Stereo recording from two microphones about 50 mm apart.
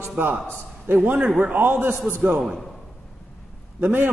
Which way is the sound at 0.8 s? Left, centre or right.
Right.